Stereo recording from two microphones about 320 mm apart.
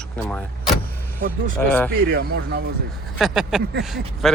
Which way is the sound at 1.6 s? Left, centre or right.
Centre.